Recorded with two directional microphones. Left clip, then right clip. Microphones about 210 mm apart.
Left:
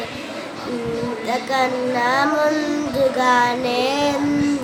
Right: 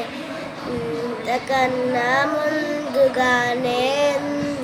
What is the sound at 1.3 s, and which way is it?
Child singing, 15° left (ahead or behind).